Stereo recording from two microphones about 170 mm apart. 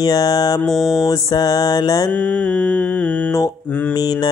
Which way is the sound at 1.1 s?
20° left (ahead or behind).